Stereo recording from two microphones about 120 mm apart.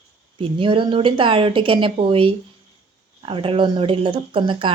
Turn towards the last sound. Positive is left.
turn(degrees=-45)  # may be behind; listen again after turning